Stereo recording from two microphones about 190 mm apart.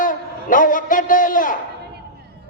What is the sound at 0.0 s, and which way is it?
A man's voice, 45° left (ahead or behind).